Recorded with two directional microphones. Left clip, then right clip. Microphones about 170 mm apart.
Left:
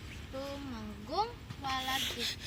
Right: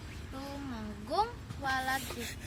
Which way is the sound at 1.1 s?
10° right (ahead or behind).